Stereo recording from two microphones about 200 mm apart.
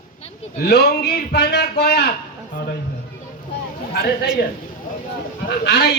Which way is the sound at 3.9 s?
45° left (ahead or behind).